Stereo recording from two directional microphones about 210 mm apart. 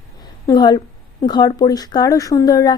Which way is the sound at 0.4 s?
20° left (ahead or behind).